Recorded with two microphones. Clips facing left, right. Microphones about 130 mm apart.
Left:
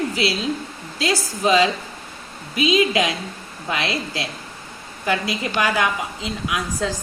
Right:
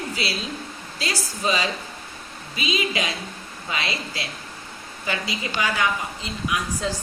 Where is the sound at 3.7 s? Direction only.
75° left (ahead or behind).